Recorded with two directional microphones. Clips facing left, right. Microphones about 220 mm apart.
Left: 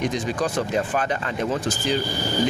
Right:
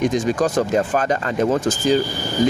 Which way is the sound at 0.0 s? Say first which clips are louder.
Right 6 dB; 45° right (ahead or behind).